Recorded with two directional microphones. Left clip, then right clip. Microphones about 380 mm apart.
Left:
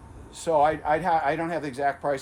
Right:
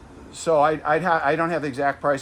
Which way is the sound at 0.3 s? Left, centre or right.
Right.